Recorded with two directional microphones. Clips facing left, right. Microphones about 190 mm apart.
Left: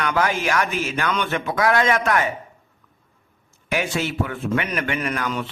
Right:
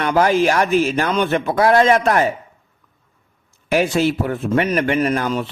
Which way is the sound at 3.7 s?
35° right (ahead or behind).